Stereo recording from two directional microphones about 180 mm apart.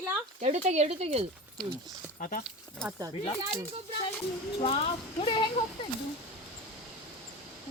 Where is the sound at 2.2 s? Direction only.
50° left (ahead or behind).